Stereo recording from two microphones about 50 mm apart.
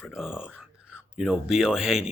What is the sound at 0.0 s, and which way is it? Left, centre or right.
Speech, centre.